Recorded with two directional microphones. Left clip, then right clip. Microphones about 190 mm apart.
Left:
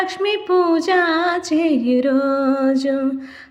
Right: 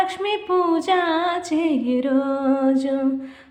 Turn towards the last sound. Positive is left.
turn(degrees=15)  # may be behind; listen again after turning